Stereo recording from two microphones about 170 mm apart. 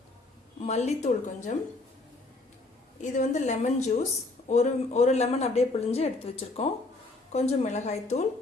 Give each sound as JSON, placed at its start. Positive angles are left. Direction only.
{"t": 0.6, "sound": "a woman's voice", "side_deg": 40}
{"t": 3.0, "sound": "a woman's voice", "side_deg": 45}